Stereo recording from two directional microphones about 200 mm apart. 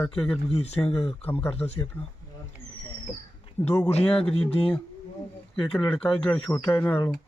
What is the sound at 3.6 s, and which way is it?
Speech, 15° left (ahead or behind).